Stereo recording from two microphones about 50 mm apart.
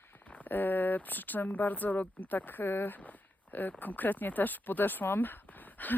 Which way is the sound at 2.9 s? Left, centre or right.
Left.